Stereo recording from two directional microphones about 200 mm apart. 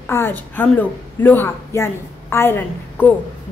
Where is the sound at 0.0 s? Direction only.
10° left (ahead or behind).